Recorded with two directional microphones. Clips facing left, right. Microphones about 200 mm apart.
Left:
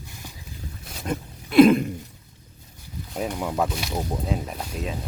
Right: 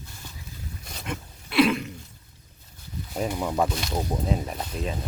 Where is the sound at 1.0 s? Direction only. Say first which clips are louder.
Left 6 dB; 40° left (ahead or behind).